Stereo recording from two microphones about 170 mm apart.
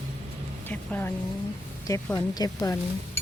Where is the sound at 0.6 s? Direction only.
10° left (ahead or behind).